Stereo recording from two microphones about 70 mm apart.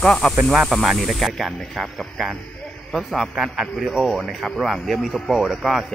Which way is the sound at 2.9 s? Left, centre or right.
Centre.